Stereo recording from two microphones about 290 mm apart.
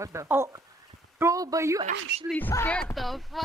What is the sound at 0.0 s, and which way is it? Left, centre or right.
Speech, centre.